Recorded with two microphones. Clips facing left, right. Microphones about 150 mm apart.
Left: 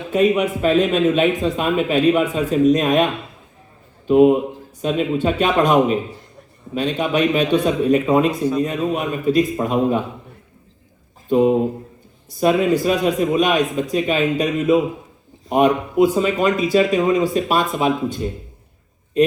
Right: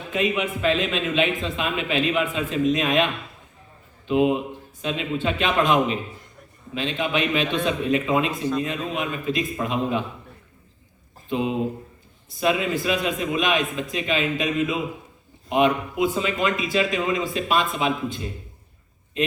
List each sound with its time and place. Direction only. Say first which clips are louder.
0.1 s a man's voice: left 8 dB; 40° left (ahead or behind)
8.4 s a man's voice: left 5 dB; 10° left (ahead or behind)
8.6 s a man's voice: left 6 dB; 40° left (ahead or behind)
11.3 s a man's voice: left 9 dB; 40° left (ahead or behind)